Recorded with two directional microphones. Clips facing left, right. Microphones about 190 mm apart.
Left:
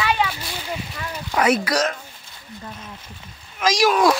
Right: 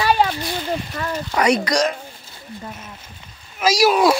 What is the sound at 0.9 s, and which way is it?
Speech, 50° right (ahead or behind).